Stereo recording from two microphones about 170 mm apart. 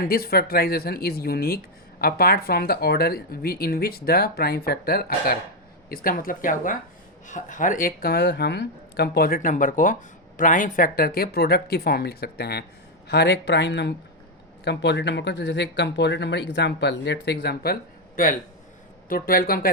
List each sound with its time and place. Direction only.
0.1 s speech: 65° left (ahead or behind)
19.0 s speech: 55° left (ahead or behind)